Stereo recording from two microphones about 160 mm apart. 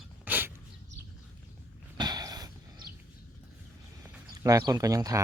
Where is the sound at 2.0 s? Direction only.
25° right (ahead or behind).